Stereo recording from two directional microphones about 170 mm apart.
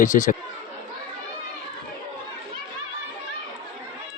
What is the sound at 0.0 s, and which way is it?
Speech, 50° left (ahead or behind).